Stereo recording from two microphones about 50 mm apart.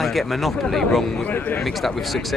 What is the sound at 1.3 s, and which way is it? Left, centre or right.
Speech, left.